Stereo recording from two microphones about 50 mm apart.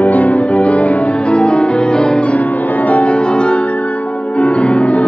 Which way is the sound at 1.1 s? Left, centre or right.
Left.